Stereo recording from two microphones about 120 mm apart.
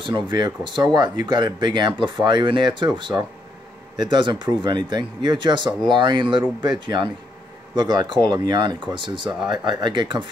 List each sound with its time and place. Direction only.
0.0 s speech: 40° right (ahead or behind)
7.7 s speech: 35° right (ahead or behind)